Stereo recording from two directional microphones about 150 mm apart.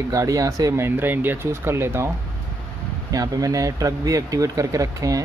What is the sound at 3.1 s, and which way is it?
Speech, 25° right (ahead or behind).